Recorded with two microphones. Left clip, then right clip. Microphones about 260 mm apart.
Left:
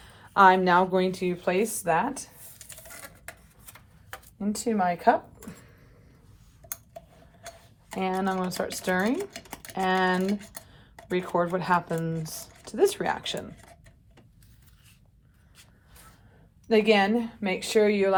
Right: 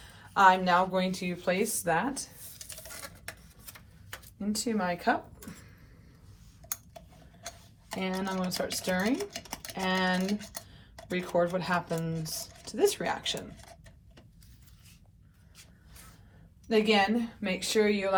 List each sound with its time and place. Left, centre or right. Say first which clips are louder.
0.0 s speech: left 4 dB; left
2.6 s patter: right 1 dB; centre
4.4 s speech: left 5 dB; left
7.9 s speech: left 6 dB; left
9.3 s dishes: right 1 dB; centre
9.7 s speech: left 5 dB; left
10.2 s a sound: left 4 dB; centre
11.1 s speech: left 2 dB; left
16.6 s speech: left 4 dB; left